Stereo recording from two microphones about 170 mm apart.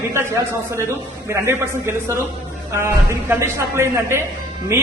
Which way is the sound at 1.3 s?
15° right (ahead or behind).